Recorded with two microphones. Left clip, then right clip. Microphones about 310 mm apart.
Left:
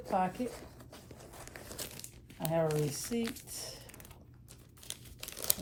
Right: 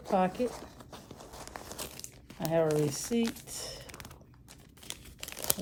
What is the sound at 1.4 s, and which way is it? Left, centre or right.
Crumpling, centre.